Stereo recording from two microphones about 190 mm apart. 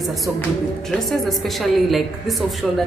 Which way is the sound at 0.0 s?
Centre (ahead or behind).